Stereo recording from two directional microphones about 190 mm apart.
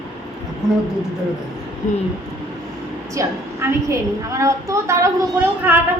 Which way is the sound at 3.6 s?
15° right (ahead or behind).